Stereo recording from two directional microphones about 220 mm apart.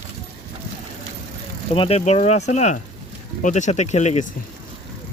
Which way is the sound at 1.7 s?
25° left (ahead or behind).